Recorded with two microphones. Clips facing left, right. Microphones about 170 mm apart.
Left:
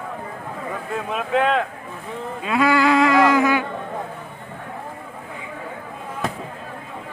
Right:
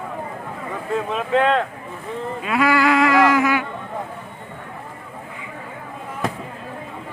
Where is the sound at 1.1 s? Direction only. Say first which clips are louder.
Right 1 dB; 5° left (ahead or behind).